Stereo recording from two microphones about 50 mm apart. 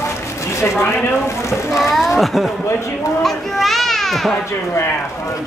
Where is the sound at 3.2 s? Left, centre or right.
Centre.